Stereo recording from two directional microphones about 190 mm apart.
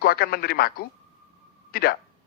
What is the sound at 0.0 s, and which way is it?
A man's voice, 55° left (ahead or behind).